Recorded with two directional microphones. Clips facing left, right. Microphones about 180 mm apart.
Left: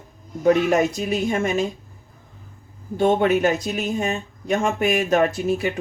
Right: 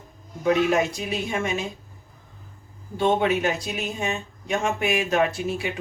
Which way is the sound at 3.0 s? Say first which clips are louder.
Left 4 dB; 45° left (ahead or behind).